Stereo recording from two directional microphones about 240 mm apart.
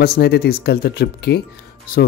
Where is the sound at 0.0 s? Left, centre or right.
Left.